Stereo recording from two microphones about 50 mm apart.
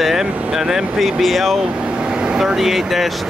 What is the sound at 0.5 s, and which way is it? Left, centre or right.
Speech, centre.